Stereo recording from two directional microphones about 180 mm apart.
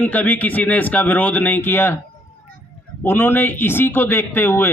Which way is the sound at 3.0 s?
10° left (ahead or behind).